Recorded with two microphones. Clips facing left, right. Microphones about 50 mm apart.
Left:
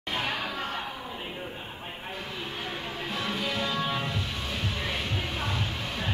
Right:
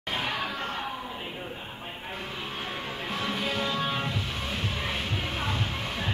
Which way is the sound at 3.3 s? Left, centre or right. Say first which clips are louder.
Right 1 dB; right.